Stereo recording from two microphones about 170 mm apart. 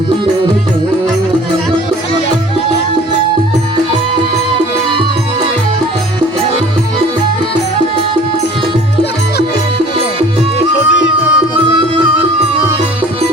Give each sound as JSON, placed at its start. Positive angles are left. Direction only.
{"t": 10.8, "sound": "music", "side_deg": 90}